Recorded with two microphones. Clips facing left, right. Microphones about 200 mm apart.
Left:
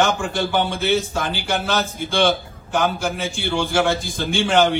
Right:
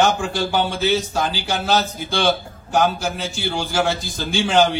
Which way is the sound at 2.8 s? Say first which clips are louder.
Even; 55° left (ahead or behind).